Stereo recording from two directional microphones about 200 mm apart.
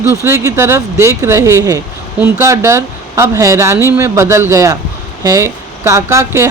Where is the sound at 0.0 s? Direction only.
10° right (ahead or behind).